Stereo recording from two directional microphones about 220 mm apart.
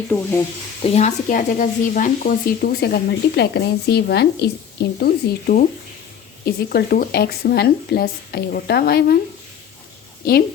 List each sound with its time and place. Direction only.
0.1 s speech: 10° left (ahead or behind)
0.8 s speech: 30° left (ahead or behind)